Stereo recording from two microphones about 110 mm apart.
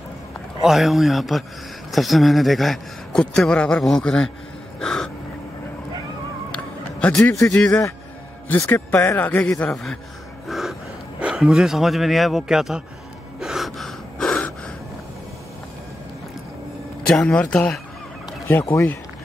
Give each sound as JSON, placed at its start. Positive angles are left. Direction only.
{"t": 0.6, "sound": "a man's voice", "side_deg": 0}
{"t": 4.7, "sound": "crow", "side_deg": 5}
{"t": 7.0, "sound": "a man's voice", "side_deg": 10}
{"t": 8.5, "sound": "a man's voice", "side_deg": 25}
{"t": 10.5, "sound": "speech", "side_deg": 0}
{"t": 13.4, "sound": "gasp", "side_deg": 0}
{"t": 17.1, "sound": "a man's voice", "side_deg": 10}